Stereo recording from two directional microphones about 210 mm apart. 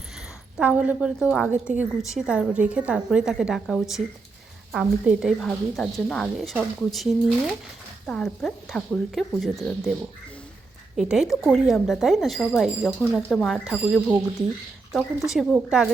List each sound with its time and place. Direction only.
0.6 s a woman's voice: 5° right (ahead or behind)
10.9 s a woman's voice: centre (ahead or behind)
15.3 s a woman's voice: centre (ahead or behind)